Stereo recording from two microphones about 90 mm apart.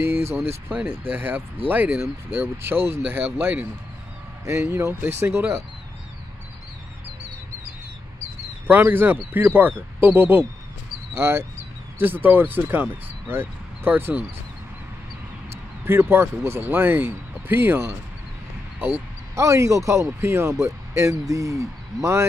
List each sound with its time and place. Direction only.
0.0 s speech: 25° right (ahead or behind)
8.6 s speech: 20° right (ahead or behind)
15.5 s speech: 25° right (ahead or behind)